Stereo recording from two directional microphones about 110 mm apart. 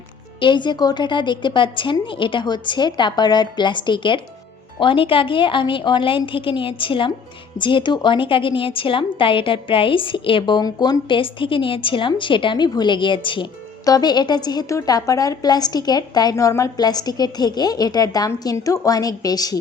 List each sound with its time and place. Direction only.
0.3 s a woman's voice: 45° left (ahead or behind)
11.2 s a woman's voice: 50° left (ahead or behind)
13.8 s a woman's voice: 40° left (ahead or behind)